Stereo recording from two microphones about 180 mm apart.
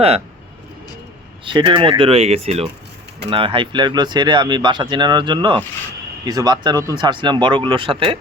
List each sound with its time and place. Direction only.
1.5 s speech: 25° right (ahead or behind)